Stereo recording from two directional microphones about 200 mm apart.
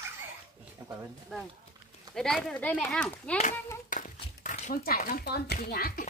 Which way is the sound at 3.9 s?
40° left (ahead or behind).